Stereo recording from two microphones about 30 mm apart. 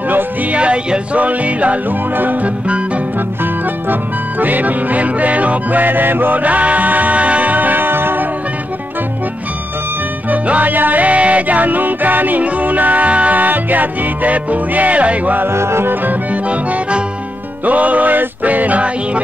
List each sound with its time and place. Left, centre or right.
0.5 s speech: right
1.1 s music: right
1.9 s music: right
3.9 s music: right
7.5 s music: right
10.3 s music: right
10.6 s music: right
12.4 s music: right
16.4 s accordion: right
17.6 s music: right